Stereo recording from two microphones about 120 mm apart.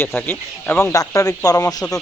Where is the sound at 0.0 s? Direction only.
20° left (ahead or behind).